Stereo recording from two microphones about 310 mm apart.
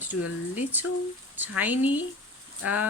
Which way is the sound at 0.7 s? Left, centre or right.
Centre.